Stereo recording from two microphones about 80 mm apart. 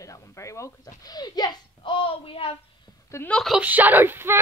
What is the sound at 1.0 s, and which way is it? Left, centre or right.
Speech, left.